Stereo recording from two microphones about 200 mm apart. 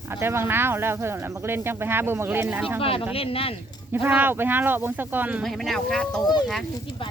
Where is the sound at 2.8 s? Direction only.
30° left (ahead or behind).